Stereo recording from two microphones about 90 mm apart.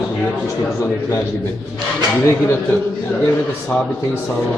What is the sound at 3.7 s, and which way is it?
Speech, 10° left (ahead or behind).